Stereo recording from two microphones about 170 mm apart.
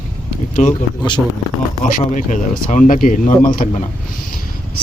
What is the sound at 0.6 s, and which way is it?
Speech, 45° left (ahead or behind).